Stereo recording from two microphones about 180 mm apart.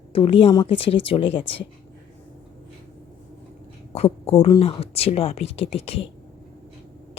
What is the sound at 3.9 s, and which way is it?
Speech, 35° left (ahead or behind).